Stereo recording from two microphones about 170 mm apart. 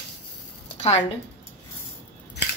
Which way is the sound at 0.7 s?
40° left (ahead or behind).